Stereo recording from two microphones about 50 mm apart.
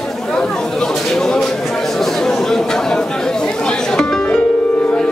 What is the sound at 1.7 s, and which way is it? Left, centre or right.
Chatter, centre.